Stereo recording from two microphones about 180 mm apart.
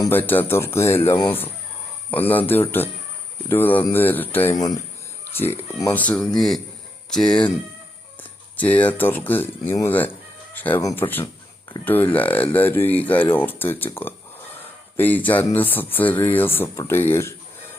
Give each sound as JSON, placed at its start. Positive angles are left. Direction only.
{"t": 0.0, "sound": "speech", "side_deg": 10}
{"t": 2.0, "sound": "speech", "side_deg": 10}
{"t": 8.5, "sound": "speech", "side_deg": 10}